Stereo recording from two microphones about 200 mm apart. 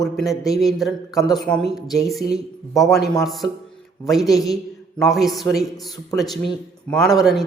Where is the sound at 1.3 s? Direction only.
Centre (ahead or behind).